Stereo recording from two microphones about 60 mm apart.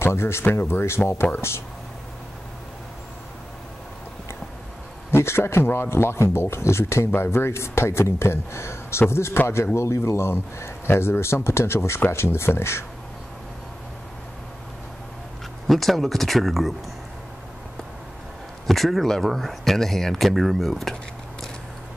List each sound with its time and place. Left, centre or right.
0.0 s speech: left
5.1 s speech: left
15.6 s speech: centre
18.7 s speech: centre